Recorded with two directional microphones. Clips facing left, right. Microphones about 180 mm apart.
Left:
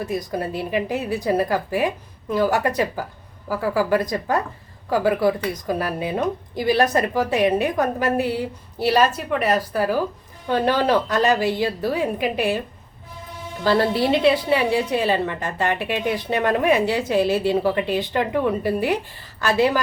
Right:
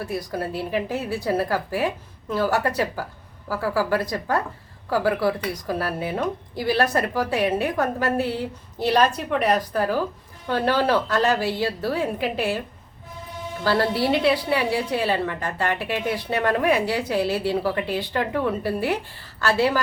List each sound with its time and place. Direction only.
0.0 s a woman's voice: 15° left (ahead or behind)
13.7 s a woman's voice: 20° left (ahead or behind)